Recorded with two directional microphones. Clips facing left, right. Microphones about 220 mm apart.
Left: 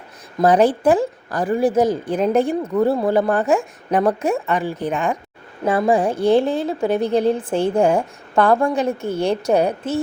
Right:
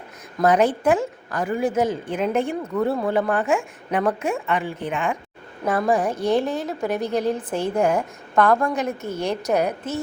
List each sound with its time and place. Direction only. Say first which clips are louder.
0.4 s speech: left 3 dB; 30° left (ahead or behind)
5.6 s a woman's voice: left 4 dB; 25° left (ahead or behind)